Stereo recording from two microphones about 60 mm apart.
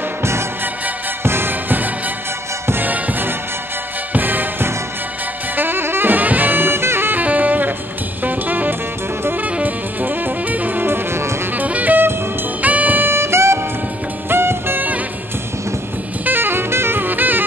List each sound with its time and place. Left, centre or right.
0.2 s music: right
5.6 s saxophone: right
8.2 s music: right
11.5 s music: right
16.3 s saxophone: right